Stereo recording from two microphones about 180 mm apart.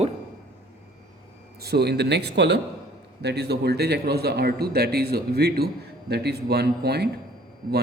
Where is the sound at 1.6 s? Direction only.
65° right (ahead or behind).